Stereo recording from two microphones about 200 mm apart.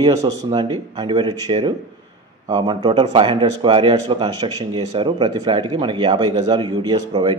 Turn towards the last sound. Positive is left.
turn(degrees=-20)  # may be behind; listen again after turning